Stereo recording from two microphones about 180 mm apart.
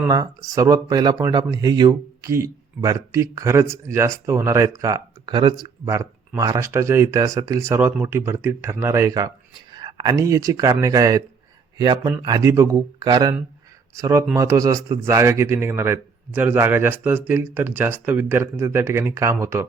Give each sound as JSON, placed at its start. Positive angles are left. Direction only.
{"t": 0.1, "sound": "speech", "side_deg": -20}